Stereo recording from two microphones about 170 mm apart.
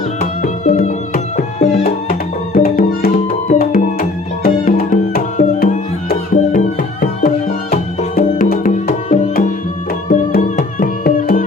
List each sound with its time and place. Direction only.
0.2 s music: 45° left (ahead or behind)
2.5 s music: 60° left (ahead or behind)